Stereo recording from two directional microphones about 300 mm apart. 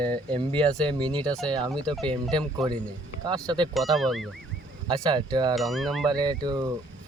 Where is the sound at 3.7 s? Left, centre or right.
Centre.